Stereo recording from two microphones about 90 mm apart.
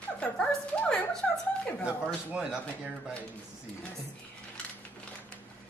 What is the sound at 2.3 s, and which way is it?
Speech, 10° right (ahead or behind).